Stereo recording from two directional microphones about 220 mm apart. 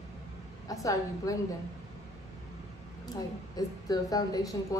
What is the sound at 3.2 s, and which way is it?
A woman's voice, 15° left (ahead or behind).